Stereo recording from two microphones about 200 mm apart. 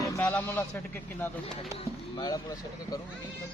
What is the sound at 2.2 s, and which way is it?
Speech, 20° left (ahead or behind).